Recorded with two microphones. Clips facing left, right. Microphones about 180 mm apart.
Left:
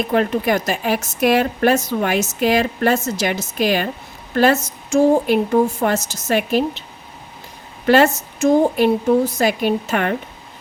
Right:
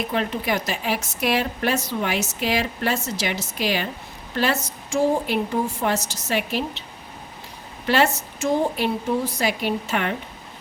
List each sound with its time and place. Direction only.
0.1 s a woman's voice: 50° left (ahead or behind)
7.9 s a woman's voice: 45° left (ahead or behind)